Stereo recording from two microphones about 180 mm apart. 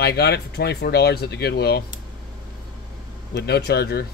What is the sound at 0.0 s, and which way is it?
Speech, 65° left (ahead or behind).